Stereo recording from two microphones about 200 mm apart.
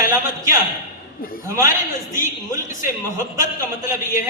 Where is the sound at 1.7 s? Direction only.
40° left (ahead or behind).